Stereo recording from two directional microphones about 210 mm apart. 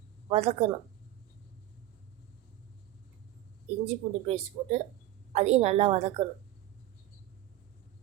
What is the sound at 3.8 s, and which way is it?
A woman's voice, 30° right (ahead or behind).